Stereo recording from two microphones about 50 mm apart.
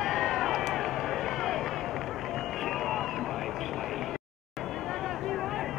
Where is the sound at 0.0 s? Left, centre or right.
Centre.